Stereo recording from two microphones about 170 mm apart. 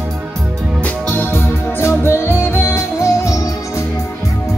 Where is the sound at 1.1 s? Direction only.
15° left (ahead or behind).